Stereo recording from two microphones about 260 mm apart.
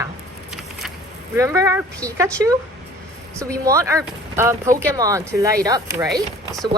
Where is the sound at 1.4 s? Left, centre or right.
Centre.